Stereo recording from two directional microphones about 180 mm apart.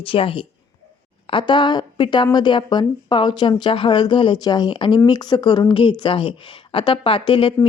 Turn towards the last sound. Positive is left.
turn(degrees=30)  # may be behind; listen again after turning